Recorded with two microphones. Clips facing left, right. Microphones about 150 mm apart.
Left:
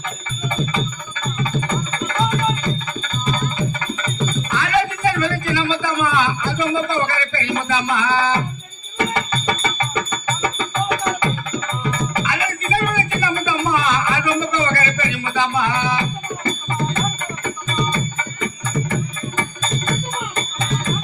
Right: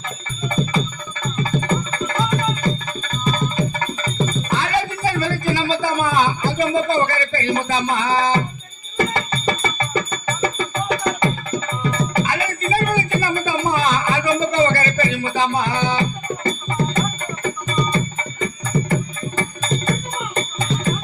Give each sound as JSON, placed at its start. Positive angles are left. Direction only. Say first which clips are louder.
{"t": 0.4, "sound": "music", "louder": "right 2 dB", "side_deg": -35}